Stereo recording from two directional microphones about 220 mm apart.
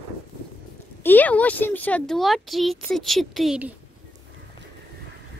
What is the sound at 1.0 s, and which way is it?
Speech, 10° left (ahead or behind).